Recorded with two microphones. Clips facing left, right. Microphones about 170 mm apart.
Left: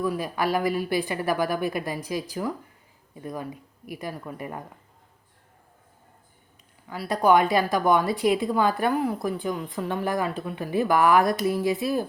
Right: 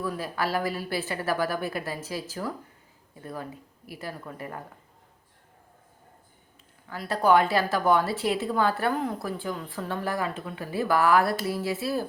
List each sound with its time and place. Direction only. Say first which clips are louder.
0.0 s a woman's voice: left 4 dB; 15° left (ahead or behind)
3.8 s a woman's voice: left 4 dB; 15° left (ahead or behind)
6.8 s a woman's voice: left 2 dB; 10° left (ahead or behind)